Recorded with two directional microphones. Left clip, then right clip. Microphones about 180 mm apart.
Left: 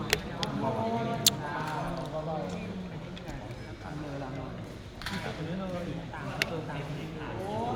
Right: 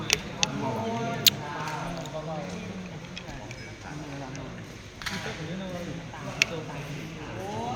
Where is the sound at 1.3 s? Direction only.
20° left (ahead or behind).